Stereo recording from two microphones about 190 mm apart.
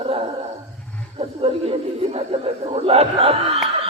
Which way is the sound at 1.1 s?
30° right (ahead or behind).